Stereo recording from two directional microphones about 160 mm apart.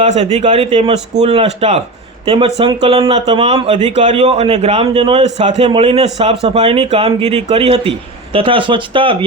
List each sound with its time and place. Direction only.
0.0 s a man's voice: 45° right (ahead or behind)